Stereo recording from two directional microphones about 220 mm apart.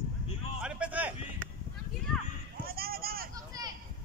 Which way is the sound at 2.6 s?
45° right (ahead or behind).